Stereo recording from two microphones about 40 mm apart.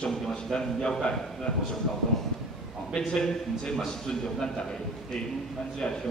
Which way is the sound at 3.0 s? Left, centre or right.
Centre.